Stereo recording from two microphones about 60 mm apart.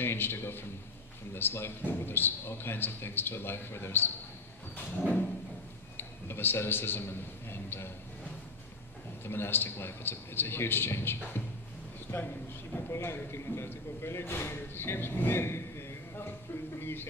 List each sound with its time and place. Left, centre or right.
0.0 s a man's voice: left
4.7 s a sound: left
5.9 s a man's voice: left
9.2 s a man's voice: left
12.9 s speech: left
16.8 s a man's voice: left